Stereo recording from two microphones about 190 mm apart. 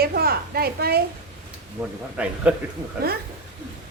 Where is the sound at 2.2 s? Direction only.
5° right (ahead or behind).